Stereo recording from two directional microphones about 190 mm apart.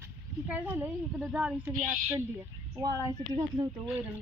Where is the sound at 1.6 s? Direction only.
15° right (ahead or behind).